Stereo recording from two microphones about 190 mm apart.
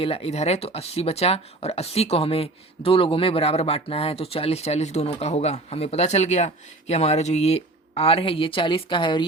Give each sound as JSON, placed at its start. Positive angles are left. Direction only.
{"t": 0.0, "sound": "speech", "side_deg": 30}